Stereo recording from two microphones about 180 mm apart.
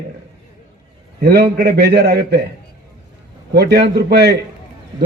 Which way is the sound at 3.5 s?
65° right (ahead or behind).